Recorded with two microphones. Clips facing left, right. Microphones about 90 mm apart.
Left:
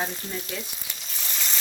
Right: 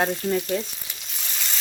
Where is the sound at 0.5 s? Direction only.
45° right (ahead or behind).